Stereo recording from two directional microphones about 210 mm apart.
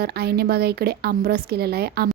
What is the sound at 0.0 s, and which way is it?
A woman's voice, 50° right (ahead or behind).